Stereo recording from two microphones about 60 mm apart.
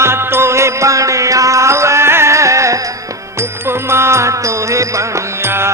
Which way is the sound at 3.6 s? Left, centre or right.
Right.